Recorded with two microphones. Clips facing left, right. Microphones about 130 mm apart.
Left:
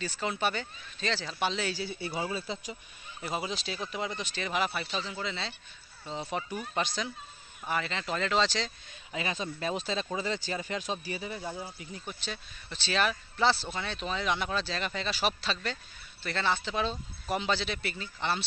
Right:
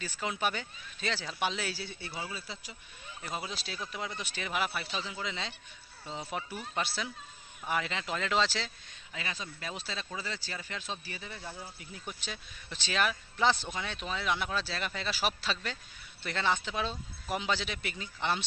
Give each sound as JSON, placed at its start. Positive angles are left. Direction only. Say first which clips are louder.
{"t": 0.0, "sound": "speech", "louder": "left 2 dB", "side_deg": -10}
{"t": 1.9, "sound": "speech", "louder": "left 7 dB", "side_deg": 10}
{"t": 2.1, "sound": "speech", "louder": "left 7 dB", "side_deg": 25}
{"t": 3.2, "sound": "speech", "louder": "left 4 dB", "side_deg": 10}
{"t": 3.4, "sound": "speech", "louder": "left 4 dB", "side_deg": 0}
{"t": 9.1, "sound": "speech", "louder": "left 7 dB", "side_deg": 20}
{"t": 11.8, "sound": "speech", "louder": "left 3 dB", "side_deg": -5}